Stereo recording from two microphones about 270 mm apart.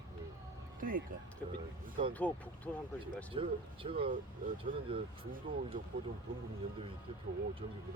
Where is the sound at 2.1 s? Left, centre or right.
Centre.